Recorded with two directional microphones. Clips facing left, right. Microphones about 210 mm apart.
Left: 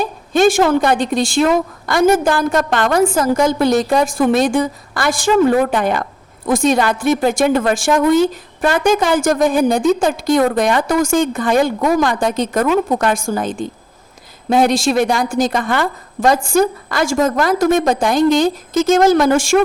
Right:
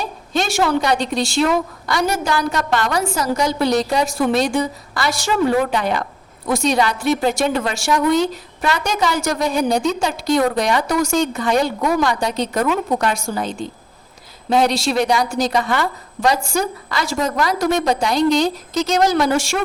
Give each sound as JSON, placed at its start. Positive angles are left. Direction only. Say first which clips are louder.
{"t": 0.0, "sound": "a woman's voice", "louder": "left 9 dB", "side_deg": 50}